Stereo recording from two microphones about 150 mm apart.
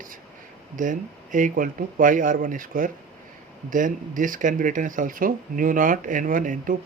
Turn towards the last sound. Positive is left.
turn(degrees=-60)  # may be behind; listen again after turning